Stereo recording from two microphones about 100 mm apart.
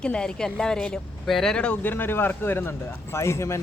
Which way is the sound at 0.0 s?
10° left (ahead or behind).